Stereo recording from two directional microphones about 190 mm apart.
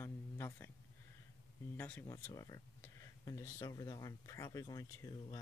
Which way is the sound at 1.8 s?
10° left (ahead or behind).